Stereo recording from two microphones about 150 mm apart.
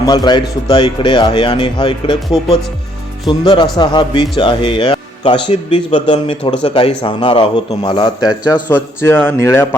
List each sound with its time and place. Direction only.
0.0 s speech: 25° left (ahead or behind)
8.7 s a man's voice: 15° left (ahead or behind)